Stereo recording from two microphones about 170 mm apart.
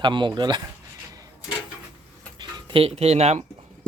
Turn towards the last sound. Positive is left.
turn(degrees=-40)  # may be behind; listen again after turning